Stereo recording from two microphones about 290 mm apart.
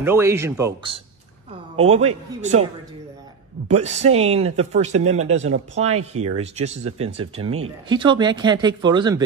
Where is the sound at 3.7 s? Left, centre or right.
Right.